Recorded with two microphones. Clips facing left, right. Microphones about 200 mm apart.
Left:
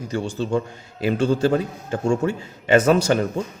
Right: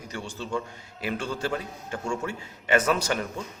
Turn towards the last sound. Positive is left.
turn(degrees=30)  # may be behind; listen again after turning